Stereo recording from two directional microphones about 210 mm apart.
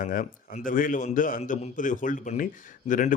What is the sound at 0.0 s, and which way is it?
A man's voice, 40° left (ahead or behind).